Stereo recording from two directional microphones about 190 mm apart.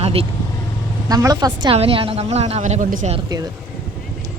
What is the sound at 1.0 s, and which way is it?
A woman's voice, 20° right (ahead or behind).